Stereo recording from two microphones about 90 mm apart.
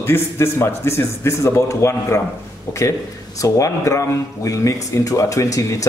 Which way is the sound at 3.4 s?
40° left (ahead or behind).